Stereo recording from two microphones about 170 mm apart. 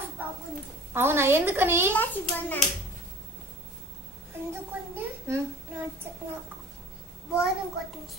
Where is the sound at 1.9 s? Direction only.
10° left (ahead or behind).